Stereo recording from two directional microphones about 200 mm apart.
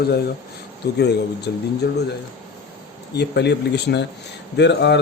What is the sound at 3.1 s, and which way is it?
Speech, 55° left (ahead or behind).